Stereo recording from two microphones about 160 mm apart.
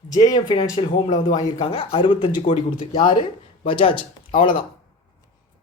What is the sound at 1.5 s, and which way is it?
Speech, 35° left (ahead or behind).